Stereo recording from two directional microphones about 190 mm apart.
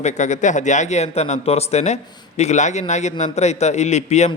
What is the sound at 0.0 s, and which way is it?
A man's voice, 40° left (ahead or behind).